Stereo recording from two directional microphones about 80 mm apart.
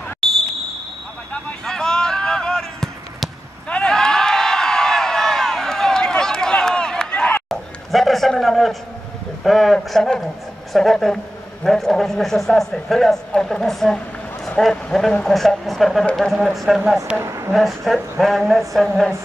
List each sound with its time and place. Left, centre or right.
0.2 s basketball bounce: centre
1.3 s a sound: centre
7.4 s a sound: centre
10.7 s speech: centre
17.2 s speech: right
17.6 s speech: centre